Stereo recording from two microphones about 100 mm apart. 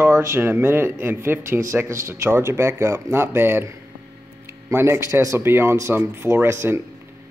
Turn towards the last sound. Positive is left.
turn(degrees=-25)  # may be behind; listen again after turning